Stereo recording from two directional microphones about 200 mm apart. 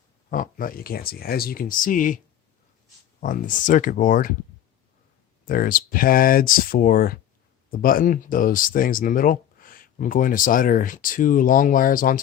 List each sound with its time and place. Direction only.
0.3 s speech: 45° left (ahead or behind)
3.2 s speech: 40° left (ahead or behind)
5.5 s speech: 45° left (ahead or behind)